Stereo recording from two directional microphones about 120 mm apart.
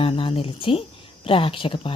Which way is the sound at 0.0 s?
50° left (ahead or behind).